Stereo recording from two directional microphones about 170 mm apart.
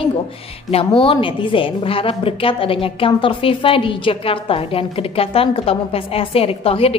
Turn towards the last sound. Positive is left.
turn(degrees=35)  # may be behind; listen again after turning